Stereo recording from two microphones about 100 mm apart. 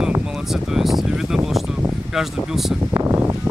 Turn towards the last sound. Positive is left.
turn(degrees=-25)  # may be behind; listen again after turning